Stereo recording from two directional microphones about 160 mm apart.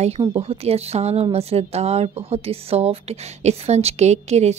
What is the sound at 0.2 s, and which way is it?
Speech, 35° right (ahead or behind).